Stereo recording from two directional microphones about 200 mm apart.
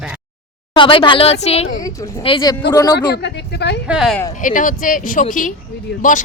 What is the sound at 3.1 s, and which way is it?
Speech, 60° left (ahead or behind).